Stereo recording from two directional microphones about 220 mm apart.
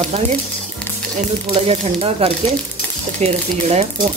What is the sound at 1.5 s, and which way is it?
Speech, 25° right (ahead or behind).